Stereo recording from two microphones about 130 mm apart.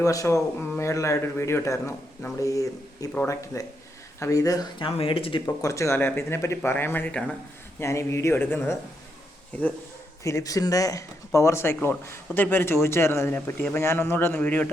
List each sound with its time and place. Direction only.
0.0 s a man's voice: 25° left (ahead or behind)
4.9 s speech: 50° left (ahead or behind)
5.5 s a man's voice: 25° left (ahead or behind)
7.8 s a man's voice: 20° left (ahead or behind)
10.2 s a man's voice: 25° left (ahead or behind)